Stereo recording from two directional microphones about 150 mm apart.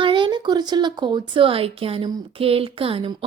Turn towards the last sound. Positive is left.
turn(degrees=-35)  # may be behind; listen again after turning